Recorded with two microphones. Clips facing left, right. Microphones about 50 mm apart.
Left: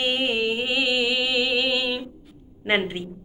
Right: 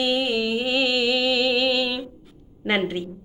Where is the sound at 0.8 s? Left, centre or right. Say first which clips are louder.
Right 2 dB; centre.